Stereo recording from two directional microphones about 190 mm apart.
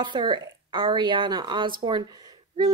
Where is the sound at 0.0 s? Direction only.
25° right (ahead or behind).